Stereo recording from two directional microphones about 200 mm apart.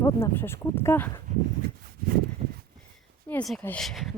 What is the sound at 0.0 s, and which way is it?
Speech, 10° left (ahead or behind).